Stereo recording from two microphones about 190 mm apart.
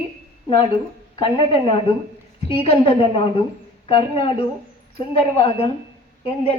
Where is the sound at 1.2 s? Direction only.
25° left (ahead or behind).